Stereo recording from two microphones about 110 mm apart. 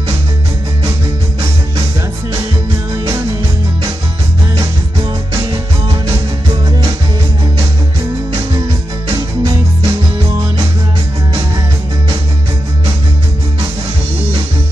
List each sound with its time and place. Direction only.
3.0 s music: 30° right (ahead or behind)
9.1 s music: 30° right (ahead or behind)